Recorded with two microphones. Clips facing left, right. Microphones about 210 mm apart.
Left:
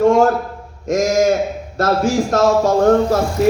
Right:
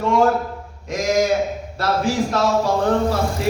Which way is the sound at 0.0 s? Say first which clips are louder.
Left 6 dB; 45° left (ahead or behind).